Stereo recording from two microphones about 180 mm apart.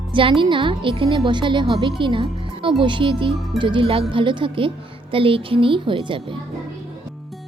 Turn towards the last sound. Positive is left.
turn(degrees=-25)  # may be behind; listen again after turning